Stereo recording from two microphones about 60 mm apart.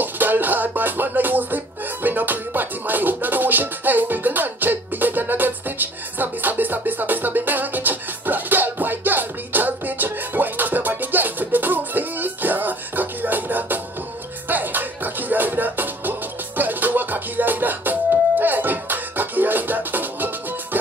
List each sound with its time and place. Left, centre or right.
0.0 s music: right